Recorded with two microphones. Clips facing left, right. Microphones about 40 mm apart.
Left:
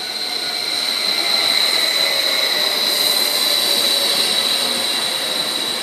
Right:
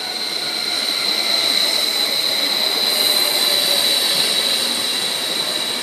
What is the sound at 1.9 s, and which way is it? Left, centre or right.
Jet engine, left.